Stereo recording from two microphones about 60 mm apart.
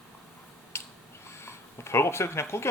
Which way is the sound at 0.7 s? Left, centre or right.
Left.